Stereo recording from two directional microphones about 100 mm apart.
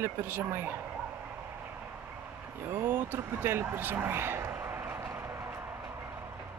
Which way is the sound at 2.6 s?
20° right (ahead or behind).